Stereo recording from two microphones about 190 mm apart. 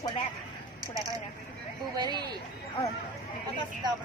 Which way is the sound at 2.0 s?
20° right (ahead or behind).